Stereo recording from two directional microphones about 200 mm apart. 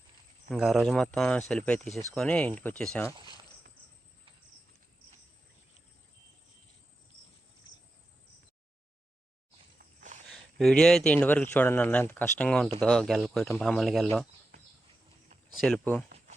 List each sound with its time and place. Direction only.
0.5 s speech: centre (ahead or behind)
10.3 s speech: 5° left (ahead or behind)
15.6 s speech: 5° left (ahead or behind)